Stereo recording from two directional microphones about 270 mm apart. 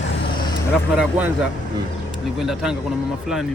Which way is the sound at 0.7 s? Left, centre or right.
Centre.